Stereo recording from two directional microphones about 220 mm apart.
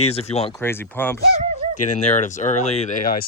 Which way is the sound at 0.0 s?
25° left (ahead or behind).